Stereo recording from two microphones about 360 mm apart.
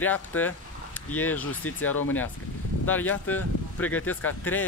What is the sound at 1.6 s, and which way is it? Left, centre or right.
Speech, left.